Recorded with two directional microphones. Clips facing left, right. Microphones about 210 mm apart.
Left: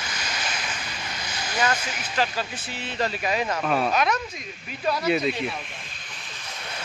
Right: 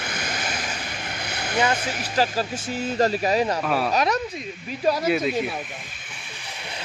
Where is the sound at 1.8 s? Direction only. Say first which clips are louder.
Right 4 dB; 35° right (ahead or behind).